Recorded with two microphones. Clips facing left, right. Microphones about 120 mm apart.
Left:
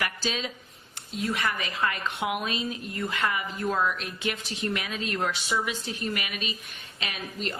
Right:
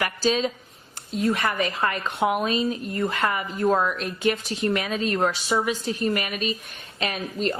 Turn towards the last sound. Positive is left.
turn(degrees=-40)  # may be behind; listen again after turning